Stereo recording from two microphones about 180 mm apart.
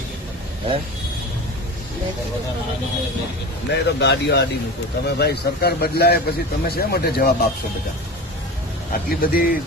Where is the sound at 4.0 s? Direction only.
70° left (ahead or behind).